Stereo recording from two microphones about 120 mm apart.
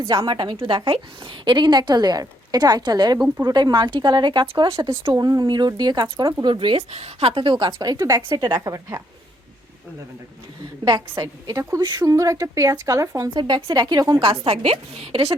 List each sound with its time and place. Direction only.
0.1 s a woman's voice: 35° right (ahead or behind)
5.1 s a woman's voice: 30° right (ahead or behind)
11.2 s a woman's voice: 30° right (ahead or behind)
14.2 s a woman's voice: 50° right (ahead or behind)